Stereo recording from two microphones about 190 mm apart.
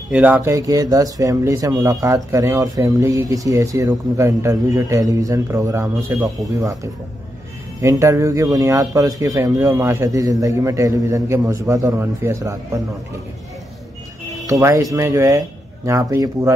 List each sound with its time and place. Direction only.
0.1 s speech: 10° right (ahead or behind)
14.4 s speech: 15° right (ahead or behind)